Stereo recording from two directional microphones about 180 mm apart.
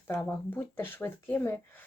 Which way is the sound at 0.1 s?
10° left (ahead or behind).